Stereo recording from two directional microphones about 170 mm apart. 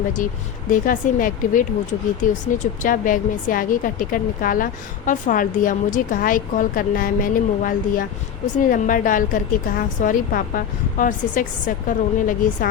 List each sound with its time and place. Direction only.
0.2 s a woman's voice: 50° left (ahead or behind)